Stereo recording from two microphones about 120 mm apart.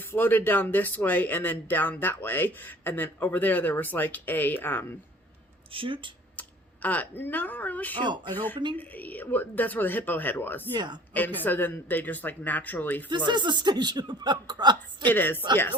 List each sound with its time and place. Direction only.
0.0 s speech: 15° left (ahead or behind)
5.7 s speech: 45° right (ahead or behind)
6.8 s speech: 15° left (ahead or behind)
10.8 s speech: 40° right (ahead or behind)
11.1 s speech: 15° left (ahead or behind)
13.1 s speech: 40° right (ahead or behind)
15.0 s speech: 15° left (ahead or behind)